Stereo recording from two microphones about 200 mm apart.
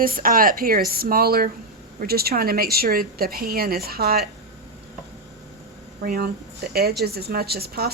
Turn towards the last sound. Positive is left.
turn(degrees=-50)  # may be behind; listen again after turning